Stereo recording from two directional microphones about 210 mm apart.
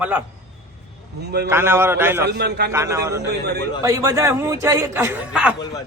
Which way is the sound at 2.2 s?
50° right (ahead or behind).